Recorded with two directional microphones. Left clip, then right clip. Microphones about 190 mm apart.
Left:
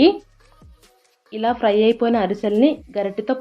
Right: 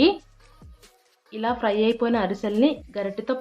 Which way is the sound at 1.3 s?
15° left (ahead or behind).